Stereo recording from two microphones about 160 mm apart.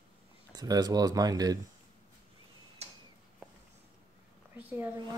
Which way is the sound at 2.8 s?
40° right (ahead or behind).